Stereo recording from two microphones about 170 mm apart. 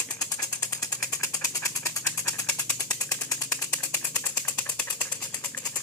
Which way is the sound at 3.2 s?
20° left (ahead or behind).